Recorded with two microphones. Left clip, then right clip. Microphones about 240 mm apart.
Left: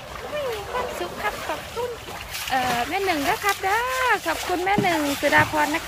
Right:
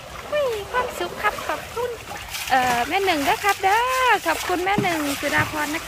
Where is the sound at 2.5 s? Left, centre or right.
Centre.